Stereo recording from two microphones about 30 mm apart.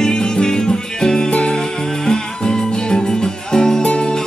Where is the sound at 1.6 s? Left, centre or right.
Left.